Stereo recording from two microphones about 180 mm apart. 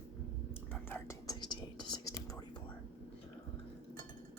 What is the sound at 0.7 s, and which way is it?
Whispering, 10° left (ahead or behind).